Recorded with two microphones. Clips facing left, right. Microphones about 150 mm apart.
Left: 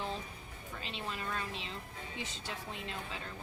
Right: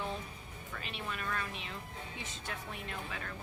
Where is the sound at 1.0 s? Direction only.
25° left (ahead or behind).